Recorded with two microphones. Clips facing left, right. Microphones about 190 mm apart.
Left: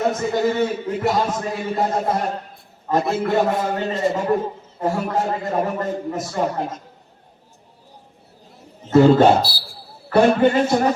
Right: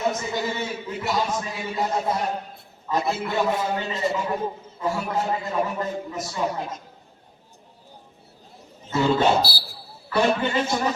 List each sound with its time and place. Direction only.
0.0 s speech: 50° left (ahead or behind)
8.9 s speech: 50° left (ahead or behind)